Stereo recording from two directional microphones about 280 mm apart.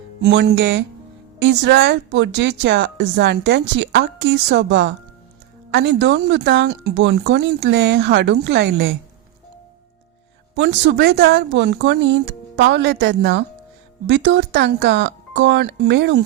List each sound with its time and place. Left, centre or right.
0.2 s speech: right
10.5 s speech: right